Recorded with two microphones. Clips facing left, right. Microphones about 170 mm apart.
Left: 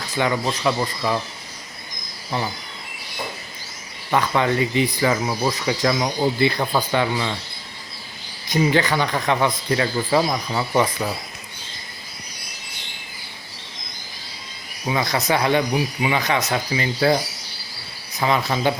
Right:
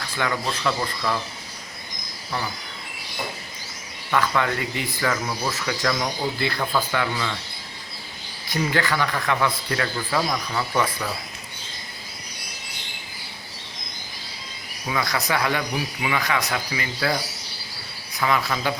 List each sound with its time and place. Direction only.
0.2 s speech: 20° left (ahead or behind)
4.1 s speech: 20° left (ahead or behind)
8.4 s speech: 20° left (ahead or behind)
14.8 s speech: 25° left (ahead or behind)
18.2 s speech: 25° left (ahead or behind)